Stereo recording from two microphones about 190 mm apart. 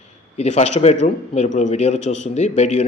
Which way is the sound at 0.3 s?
35° left (ahead or behind).